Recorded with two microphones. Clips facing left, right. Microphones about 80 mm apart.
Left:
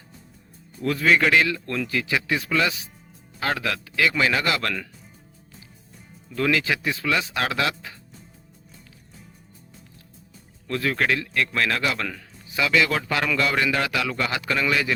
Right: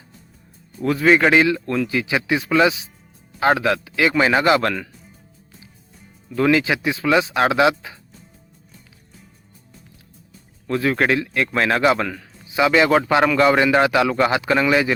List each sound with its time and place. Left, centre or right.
0.9 s a man's voice: right
6.3 s a man's voice: right
10.7 s a man's voice: right